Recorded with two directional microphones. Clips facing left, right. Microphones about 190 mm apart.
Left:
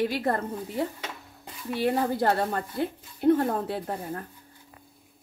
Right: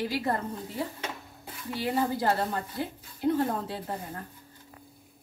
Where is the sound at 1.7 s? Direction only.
55° left (ahead or behind).